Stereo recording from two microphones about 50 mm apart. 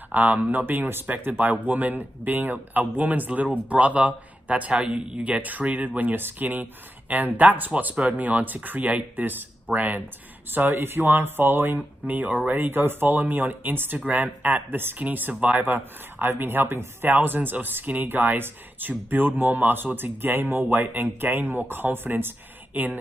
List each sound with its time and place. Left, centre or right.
0.1 s speech: right
7.9 s speech: right
10.7 s speech: right